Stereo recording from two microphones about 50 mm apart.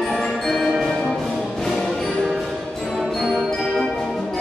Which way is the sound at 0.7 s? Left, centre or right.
Centre.